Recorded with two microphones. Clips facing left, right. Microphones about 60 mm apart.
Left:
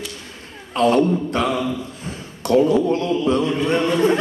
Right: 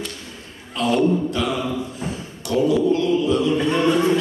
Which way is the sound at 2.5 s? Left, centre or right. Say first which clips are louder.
Left 2 dB; left.